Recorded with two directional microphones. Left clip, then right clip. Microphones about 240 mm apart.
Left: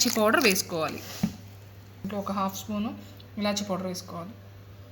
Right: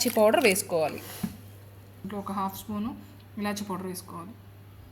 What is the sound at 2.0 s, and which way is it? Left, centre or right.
A woman's voice, left.